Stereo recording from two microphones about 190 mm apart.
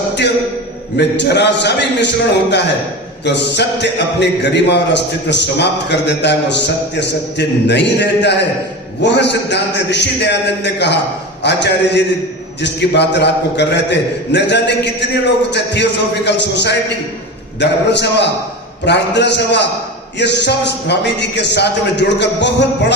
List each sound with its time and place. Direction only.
0.9 s a man's voice: 65° left (ahead or behind)